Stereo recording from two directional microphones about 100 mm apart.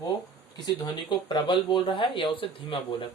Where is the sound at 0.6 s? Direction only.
50° left (ahead or behind).